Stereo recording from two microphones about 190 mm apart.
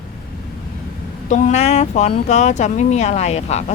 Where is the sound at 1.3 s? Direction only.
40° left (ahead or behind).